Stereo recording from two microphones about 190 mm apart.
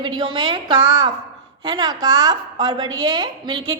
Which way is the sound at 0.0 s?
25° right (ahead or behind).